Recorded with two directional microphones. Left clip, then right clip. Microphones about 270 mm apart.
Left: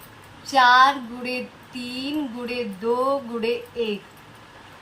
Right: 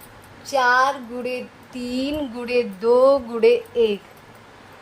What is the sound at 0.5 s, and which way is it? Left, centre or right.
Speech, right.